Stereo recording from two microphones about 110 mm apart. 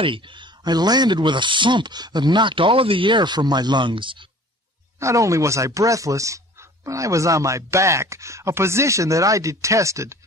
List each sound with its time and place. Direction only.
0.0 s speech: 50° right (ahead or behind)
5.0 s speech: 30° right (ahead or behind)